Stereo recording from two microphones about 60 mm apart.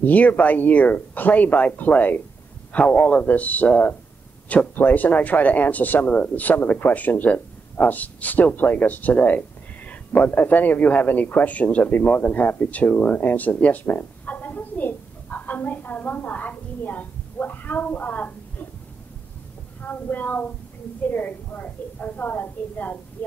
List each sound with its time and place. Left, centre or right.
0.0 s speech: left
19.8 s speech: left